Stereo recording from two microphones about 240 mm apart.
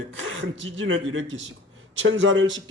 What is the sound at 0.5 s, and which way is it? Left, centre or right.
A man's voice, right.